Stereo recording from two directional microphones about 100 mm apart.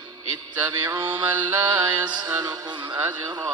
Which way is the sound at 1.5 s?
40° right (ahead or behind).